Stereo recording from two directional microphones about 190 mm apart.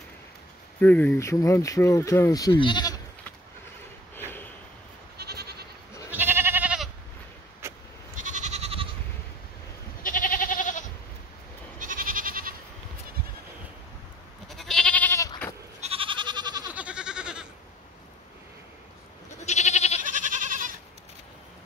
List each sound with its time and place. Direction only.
0.7 s speech: 10° left (ahead or behind)
4.1 s a sound: 10° left (ahead or behind)
5.1 s goat: 60° right (ahead or behind)
6.0 s goat: 10° right (ahead or behind)
8.2 s goat: 40° right (ahead or behind)
10.0 s goat: 45° left (ahead or behind)
11.8 s goat: 45° right (ahead or behind)
14.5 s goat: centre (ahead or behind)
15.8 s goat: 30° right (ahead or behind)
16.7 s goat: 5° right (ahead or behind)
19.3 s goat: 35° left (ahead or behind)
20.0 s goat: 45° right (ahead or behind)